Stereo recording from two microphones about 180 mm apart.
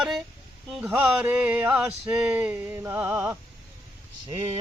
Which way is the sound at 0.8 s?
5° right (ahead or behind).